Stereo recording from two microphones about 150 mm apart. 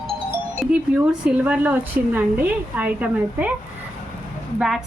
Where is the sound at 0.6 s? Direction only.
5° right (ahead or behind).